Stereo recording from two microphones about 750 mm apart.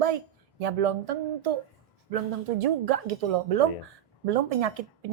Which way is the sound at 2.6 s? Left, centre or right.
Right.